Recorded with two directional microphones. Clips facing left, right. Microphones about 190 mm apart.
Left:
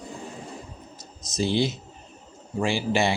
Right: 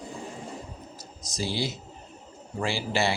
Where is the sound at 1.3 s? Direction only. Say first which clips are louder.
Left 6 dB; 20° left (ahead or behind).